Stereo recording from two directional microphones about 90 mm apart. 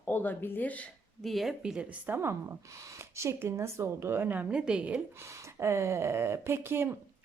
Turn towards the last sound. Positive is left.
turn(degrees=-25)  # may be behind; listen again after turning